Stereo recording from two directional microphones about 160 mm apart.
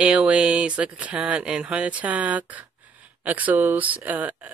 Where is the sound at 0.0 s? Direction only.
5° right (ahead or behind).